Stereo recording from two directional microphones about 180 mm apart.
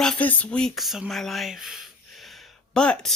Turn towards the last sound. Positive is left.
turn(degrees=5)  # may be behind; listen again after turning